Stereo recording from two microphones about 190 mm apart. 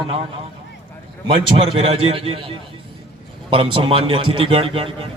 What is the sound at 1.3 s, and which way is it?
A man's voice, 25° right (ahead or behind).